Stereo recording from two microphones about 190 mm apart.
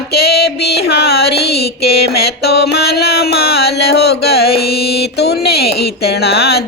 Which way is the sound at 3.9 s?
60° left (ahead or behind).